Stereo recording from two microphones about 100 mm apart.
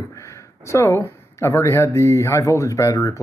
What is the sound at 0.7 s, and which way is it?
Speech, 30° left (ahead or behind).